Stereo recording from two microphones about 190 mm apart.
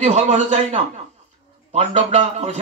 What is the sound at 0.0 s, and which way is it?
Speech, 35° right (ahead or behind).